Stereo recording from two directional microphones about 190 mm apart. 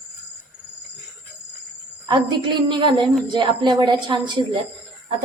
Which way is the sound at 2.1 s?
25° right (ahead or behind).